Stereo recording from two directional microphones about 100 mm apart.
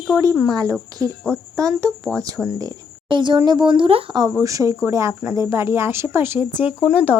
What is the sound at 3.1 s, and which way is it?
Speech, 50° right (ahead or behind).